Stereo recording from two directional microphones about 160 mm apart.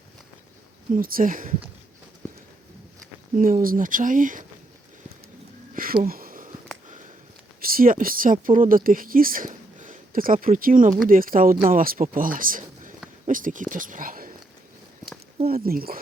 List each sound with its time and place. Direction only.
0.9 s speech: 60° right (ahead or behind)
3.3 s speech: 60° right (ahead or behind)
5.7 s sniff: 60° right (ahead or behind)
7.6 s speech: 65° right (ahead or behind)
15.4 s speech: 70° right (ahead or behind)